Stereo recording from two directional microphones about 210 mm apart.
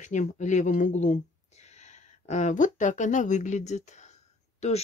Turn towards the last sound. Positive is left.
turn(degrees=35)  # may be behind; listen again after turning